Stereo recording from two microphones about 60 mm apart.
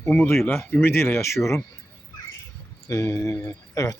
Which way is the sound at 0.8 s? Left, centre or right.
Left.